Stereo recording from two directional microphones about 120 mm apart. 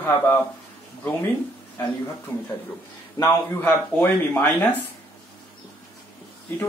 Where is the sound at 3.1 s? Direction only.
25° left (ahead or behind).